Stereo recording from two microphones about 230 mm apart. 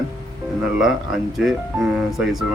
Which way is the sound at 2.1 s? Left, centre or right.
Centre.